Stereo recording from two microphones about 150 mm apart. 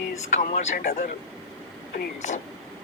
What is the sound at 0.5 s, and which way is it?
Speech, 75° left (ahead or behind).